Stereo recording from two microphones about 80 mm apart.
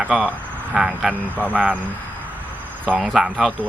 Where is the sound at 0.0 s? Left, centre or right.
Centre.